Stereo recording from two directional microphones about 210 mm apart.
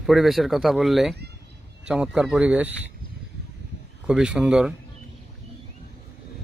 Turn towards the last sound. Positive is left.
turn(degrees=-5)  # may be behind; listen again after turning